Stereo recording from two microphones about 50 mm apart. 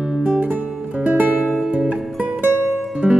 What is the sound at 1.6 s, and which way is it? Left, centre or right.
Music, right.